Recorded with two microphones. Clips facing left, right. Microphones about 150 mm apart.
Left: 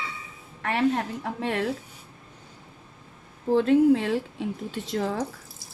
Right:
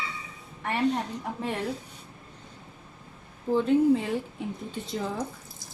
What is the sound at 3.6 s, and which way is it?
Speech, 80° left.